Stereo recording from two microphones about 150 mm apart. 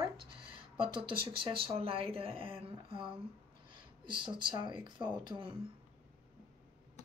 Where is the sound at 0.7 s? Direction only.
35° right (ahead or behind).